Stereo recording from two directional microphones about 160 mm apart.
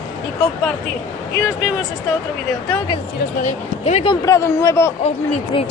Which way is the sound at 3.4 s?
45° left (ahead or behind).